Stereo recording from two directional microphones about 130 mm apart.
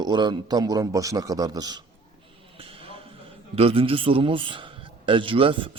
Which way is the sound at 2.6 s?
45° right (ahead or behind).